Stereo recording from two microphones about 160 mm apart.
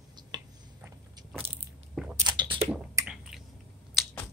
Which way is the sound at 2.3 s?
25° right (ahead or behind).